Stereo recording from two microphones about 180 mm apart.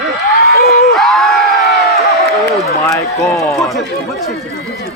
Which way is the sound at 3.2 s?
15° left (ahead or behind).